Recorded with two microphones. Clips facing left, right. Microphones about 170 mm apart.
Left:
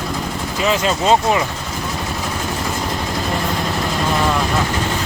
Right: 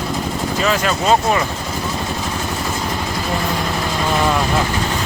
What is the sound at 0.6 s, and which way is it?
Speech, 20° left (ahead or behind).